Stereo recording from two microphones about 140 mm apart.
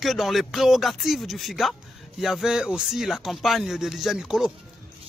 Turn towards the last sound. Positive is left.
turn(degrees=-5)  # may be behind; listen again after turning